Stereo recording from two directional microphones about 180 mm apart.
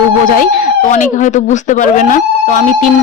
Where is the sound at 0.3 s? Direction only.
50° left (ahead or behind).